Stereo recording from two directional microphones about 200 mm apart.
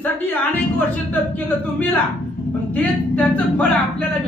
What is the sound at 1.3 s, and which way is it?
Speech, 5° left (ahead or behind).